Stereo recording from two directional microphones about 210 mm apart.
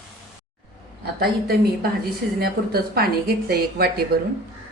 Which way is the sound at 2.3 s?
45° right (ahead or behind).